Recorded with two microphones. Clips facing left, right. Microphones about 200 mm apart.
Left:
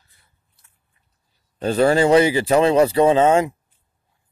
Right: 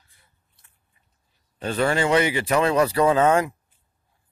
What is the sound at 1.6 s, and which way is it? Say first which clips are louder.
Speech: left 6 dB; 35° left (ahead or behind).